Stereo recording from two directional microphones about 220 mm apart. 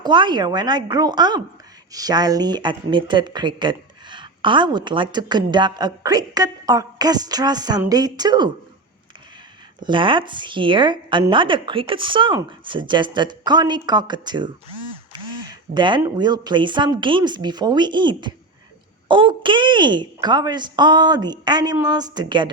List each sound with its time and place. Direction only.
0.0 s speech: 20° right (ahead or behind)
9.8 s speech: 20° right (ahead or behind)